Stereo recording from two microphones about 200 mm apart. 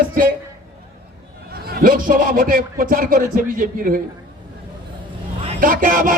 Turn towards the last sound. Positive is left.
turn(degrees=-45)  # may be behind; listen again after turning